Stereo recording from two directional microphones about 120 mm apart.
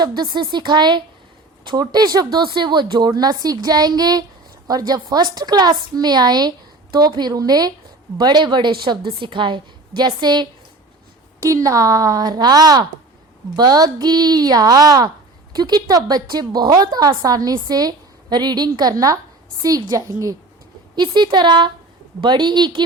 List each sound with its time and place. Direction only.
0.0 s a woman's voice: 35° right (ahead or behind)